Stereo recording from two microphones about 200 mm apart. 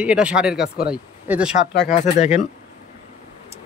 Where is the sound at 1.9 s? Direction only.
35° left (ahead or behind).